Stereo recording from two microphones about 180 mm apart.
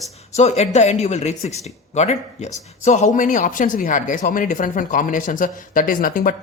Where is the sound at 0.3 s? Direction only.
40° left (ahead or behind).